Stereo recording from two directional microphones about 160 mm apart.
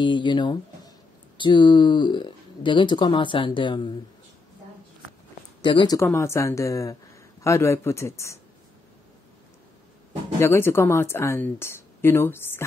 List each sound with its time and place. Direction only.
0.0 s speech: 30° left (ahead or behind)
5.6 s speech: 30° left (ahead or behind)
5.9 s a woman's voice: 15° left (ahead or behind)
10.4 s a woman's voice: 15° left (ahead or behind)